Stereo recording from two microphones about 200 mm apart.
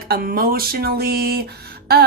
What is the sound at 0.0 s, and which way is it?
A woman's voice, 50° right (ahead or behind).